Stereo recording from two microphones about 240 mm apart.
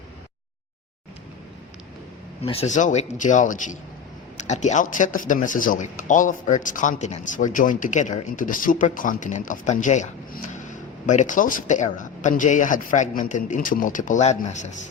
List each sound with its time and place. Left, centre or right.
2.4 s speech: left